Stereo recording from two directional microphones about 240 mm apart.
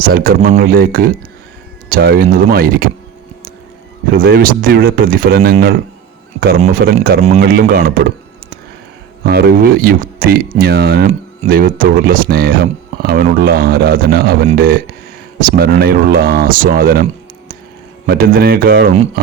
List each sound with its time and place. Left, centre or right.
0.0 s speech: right
4.1 s speech: right
9.2 s speech: right